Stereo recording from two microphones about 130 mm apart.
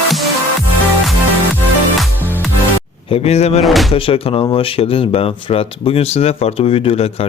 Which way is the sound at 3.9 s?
45° left (ahead or behind).